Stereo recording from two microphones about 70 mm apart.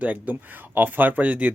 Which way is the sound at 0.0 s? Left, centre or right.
Right.